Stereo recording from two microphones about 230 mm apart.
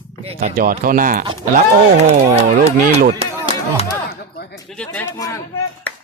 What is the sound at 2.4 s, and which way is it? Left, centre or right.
Speech, right.